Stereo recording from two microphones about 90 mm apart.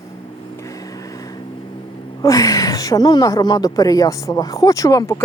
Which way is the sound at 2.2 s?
40° left (ahead or behind).